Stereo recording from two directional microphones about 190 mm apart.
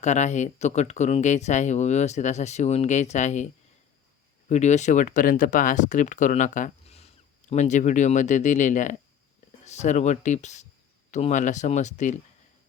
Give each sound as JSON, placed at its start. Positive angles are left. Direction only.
{"t": 0.0, "sound": "speech", "side_deg": 40}